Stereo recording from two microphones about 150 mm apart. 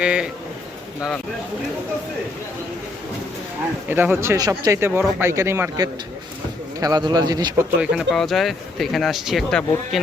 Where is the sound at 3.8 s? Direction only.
10° right (ahead or behind).